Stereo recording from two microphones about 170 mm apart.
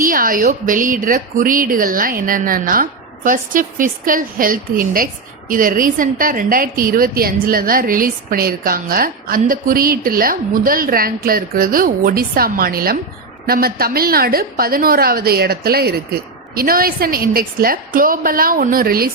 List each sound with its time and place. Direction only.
0.0 s a woman's voice: 55° right (ahead or behind)